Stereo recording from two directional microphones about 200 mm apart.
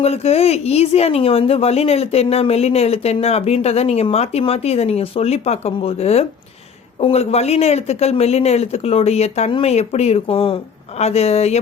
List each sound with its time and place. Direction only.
0.0 s a woman's voice: 30° left (ahead or behind)